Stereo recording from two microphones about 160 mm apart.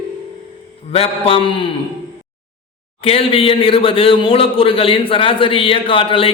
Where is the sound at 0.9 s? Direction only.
35° left (ahead or behind).